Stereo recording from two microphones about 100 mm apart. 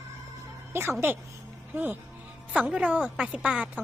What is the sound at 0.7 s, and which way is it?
Speech, 25° right (ahead or behind).